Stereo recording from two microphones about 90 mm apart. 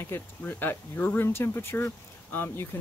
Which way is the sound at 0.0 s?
25° left (ahead or behind).